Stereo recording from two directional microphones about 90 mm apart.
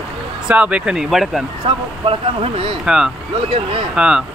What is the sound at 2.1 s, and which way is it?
Speech, 90° right.